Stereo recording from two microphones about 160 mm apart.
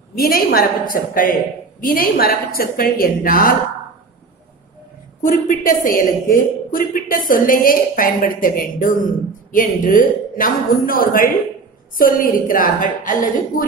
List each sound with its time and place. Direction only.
0.1 s a woman's voice: 65° left (ahead or behind)
5.2 s a woman's voice: 60° left (ahead or behind)